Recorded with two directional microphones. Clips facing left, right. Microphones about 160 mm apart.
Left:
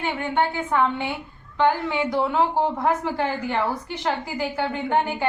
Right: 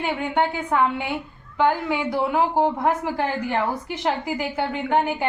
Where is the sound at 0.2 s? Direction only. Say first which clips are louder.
Right 1 dB; 15° right (ahead or behind).